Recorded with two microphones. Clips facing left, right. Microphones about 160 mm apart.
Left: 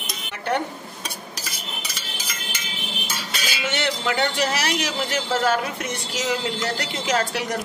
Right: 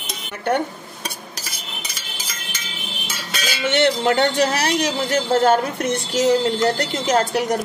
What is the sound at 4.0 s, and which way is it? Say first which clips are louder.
A man's voice: right 6 dB; 45° right (ahead or behind).